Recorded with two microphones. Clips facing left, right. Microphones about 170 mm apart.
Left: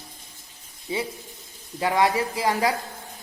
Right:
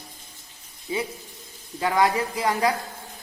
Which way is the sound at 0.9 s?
25° left (ahead or behind).